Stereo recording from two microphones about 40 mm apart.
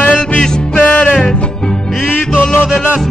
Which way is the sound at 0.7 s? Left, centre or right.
Left.